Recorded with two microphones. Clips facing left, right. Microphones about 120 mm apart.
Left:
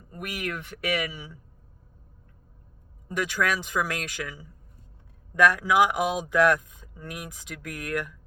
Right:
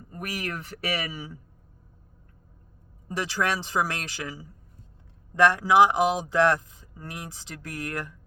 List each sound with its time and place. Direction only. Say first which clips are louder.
0.2 s speech: even; 35° right (ahead or behind)
3.1 s speech: left 1 dB; 30° right (ahead or behind)